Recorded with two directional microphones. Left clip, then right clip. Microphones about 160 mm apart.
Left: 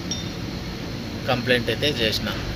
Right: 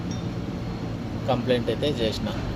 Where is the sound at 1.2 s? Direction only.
5° right (ahead or behind).